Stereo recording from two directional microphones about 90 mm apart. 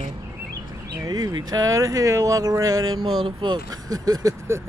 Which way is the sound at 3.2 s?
60° right (ahead or behind).